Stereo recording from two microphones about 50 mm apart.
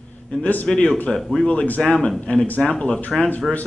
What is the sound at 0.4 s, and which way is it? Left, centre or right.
A man's voice, left.